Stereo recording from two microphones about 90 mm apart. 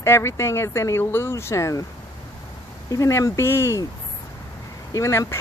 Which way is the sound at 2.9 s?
35° left (ahead or behind).